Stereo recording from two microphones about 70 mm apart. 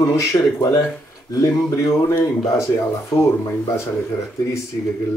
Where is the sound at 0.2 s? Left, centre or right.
Left.